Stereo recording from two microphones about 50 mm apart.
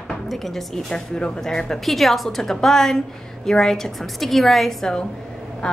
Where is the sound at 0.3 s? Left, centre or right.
Centre.